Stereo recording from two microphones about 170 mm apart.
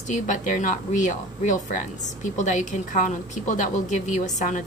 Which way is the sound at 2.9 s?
45° left (ahead or behind).